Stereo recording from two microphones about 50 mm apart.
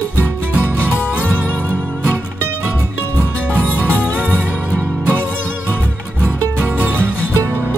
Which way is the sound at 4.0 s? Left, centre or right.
Left.